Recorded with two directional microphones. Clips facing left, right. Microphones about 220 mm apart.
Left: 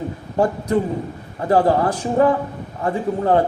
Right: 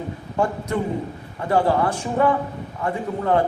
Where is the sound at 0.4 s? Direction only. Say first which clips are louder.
Left 5 dB; 35° left (ahead or behind).